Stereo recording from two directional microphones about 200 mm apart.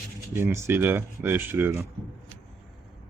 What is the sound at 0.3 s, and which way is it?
Speech, 10° right (ahead or behind).